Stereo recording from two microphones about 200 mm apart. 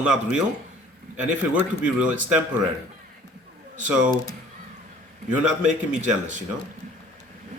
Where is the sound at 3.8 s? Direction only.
5° right (ahead or behind).